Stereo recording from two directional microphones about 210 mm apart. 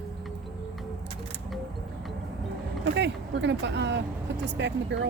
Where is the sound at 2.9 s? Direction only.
55° right (ahead or behind).